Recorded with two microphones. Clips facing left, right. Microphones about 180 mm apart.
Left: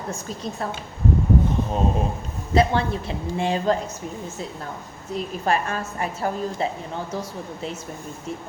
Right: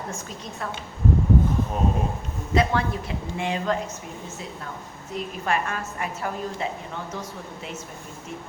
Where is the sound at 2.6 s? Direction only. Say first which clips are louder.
Left 3 dB; 30° left (ahead or behind).